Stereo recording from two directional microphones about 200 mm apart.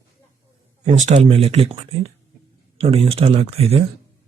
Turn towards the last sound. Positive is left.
turn(degrees=-30)  # may be behind; listen again after turning